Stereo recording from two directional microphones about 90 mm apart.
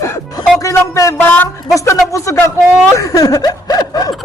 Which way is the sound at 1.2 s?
25° left (ahead or behind).